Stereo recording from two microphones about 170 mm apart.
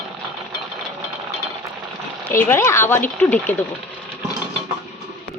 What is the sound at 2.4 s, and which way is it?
Speech, 15° left (ahead or behind).